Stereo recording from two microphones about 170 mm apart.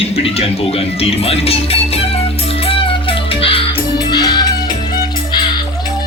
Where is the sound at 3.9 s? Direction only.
25° left (ahead or behind).